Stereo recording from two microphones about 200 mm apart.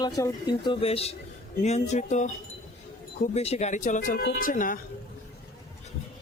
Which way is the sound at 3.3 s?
30° left (ahead or behind).